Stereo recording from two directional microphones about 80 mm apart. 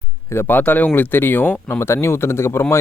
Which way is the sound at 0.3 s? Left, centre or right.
Left.